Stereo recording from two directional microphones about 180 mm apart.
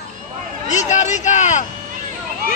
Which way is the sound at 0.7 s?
40° left (ahead or behind).